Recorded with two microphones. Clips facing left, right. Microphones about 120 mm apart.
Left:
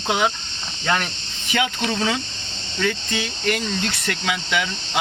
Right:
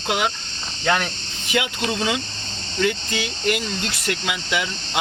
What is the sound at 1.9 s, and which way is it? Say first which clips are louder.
Speech: even; 15° right (ahead or behind).